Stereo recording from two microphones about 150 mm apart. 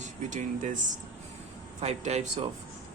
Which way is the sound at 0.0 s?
55° right (ahead or behind).